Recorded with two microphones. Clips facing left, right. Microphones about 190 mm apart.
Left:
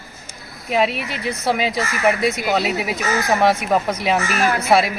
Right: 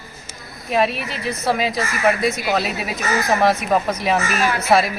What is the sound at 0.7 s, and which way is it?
Speech, 15° left (ahead or behind).